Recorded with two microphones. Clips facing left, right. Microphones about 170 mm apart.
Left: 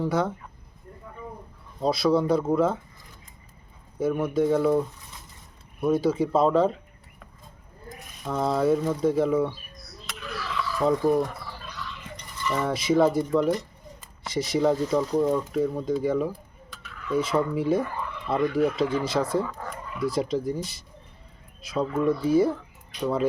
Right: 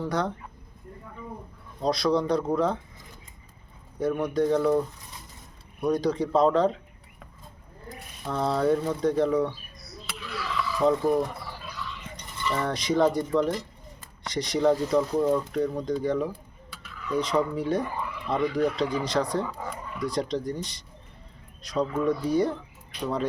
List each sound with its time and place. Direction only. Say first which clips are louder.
0.1 s speech: left 2 dB; 5° left (ahead or behind)
1.8 s speech: left 2 dB; 5° left (ahead or behind)
4.0 s speech: left 1 dB; 5° left (ahead or behind)
5.8 s speech: left 2 dB; 5° left (ahead or behind)
8.3 s speech: left 1 dB; 5° left (ahead or behind)
10.1 s a sound: even; centre (ahead or behind)
12.6 s speech: left 2 dB; 5° left (ahead or behind)
17.8 s a sound: even; 10° right (ahead or behind)
18.3 s speech: left 2 dB; centre (ahead or behind)
19.5 s speech: right 1 dB; 10° right (ahead or behind)